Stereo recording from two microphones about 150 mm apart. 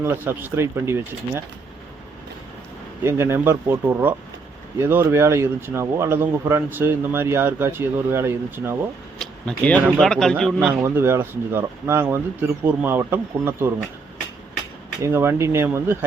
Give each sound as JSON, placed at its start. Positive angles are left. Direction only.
{"t": 0.0, "sound": "speech", "side_deg": -15}
{"t": 3.0, "sound": "speech", "side_deg": -15}
{"t": 9.1, "sound": "a sound", "side_deg": 5}
{"t": 9.9, "sound": "a man's voice", "side_deg": 5}
{"t": 10.8, "sound": "speech", "side_deg": -15}
{"t": 15.0, "sound": "speech", "side_deg": -15}